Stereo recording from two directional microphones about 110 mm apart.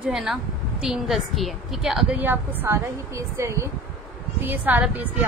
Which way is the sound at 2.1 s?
20° right (ahead or behind).